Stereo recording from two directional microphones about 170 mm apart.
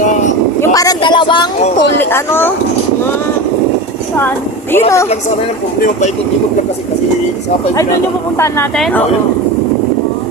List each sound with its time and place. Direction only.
0.6 s a sound: 20° left (ahead or behind)
2.0 s speech: 15° left (ahead or behind)
8.8 s speech: 10° left (ahead or behind)